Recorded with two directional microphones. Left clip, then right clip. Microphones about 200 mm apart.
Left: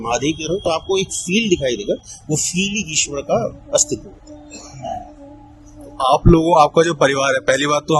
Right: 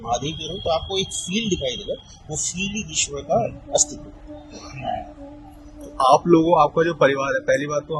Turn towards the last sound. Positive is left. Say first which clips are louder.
# left 6 dB
turn(degrees=35)  # may be behind; listen again after turning